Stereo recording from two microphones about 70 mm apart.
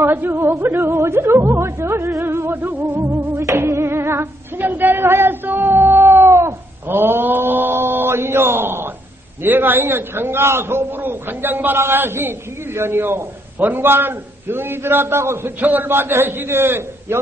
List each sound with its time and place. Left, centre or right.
0.0 s music: right
9.4 s a man's voice: right